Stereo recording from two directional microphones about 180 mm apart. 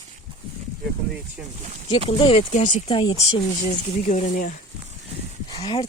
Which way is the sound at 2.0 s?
30° left (ahead or behind).